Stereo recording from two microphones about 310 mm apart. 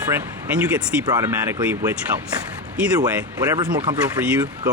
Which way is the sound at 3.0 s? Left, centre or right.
Centre.